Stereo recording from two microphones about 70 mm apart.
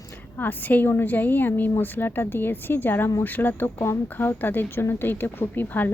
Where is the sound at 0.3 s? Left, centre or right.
Left.